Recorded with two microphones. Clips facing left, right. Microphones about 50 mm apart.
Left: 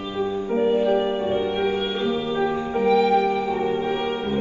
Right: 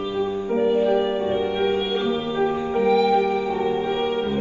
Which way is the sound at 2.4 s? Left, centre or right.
Left.